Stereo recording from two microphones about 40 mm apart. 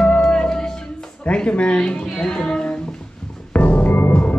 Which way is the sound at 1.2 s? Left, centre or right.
Left.